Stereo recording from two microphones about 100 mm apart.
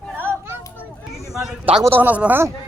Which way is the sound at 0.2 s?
25° right (ahead or behind).